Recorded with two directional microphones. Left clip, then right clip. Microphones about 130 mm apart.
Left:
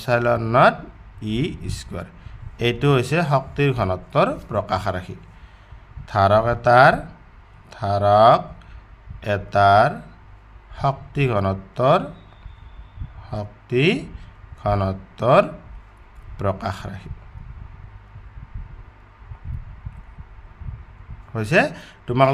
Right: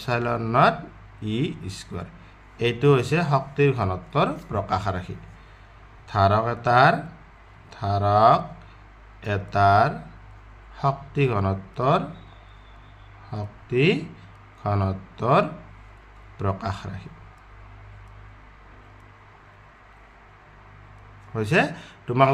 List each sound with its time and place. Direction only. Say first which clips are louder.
0.0 s speech: left 6 dB; 35° left (ahead or behind)
13.3 s speech: left 3 dB; 35° left (ahead or behind)
21.3 s speech: left 3 dB; 35° left (ahead or behind)